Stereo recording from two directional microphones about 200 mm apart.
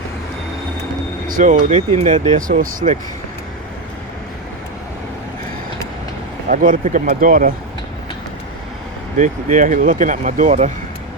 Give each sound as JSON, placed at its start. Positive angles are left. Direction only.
{"t": 1.3, "sound": "speech", "side_deg": -40}
{"t": 6.5, "sound": "speech", "side_deg": -40}
{"t": 9.1, "sound": "speech", "side_deg": -40}